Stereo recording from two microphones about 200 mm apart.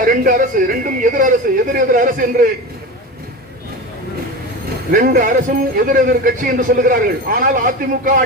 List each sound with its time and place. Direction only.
0.0 s a man's voice: 40° right (ahead or behind)
4.9 s a man's voice: 45° right (ahead or behind)